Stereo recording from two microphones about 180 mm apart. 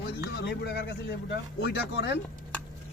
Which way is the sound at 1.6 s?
65° left (ahead or behind).